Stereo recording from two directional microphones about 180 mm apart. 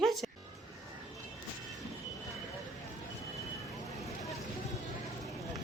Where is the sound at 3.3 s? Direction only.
Centre (ahead or behind).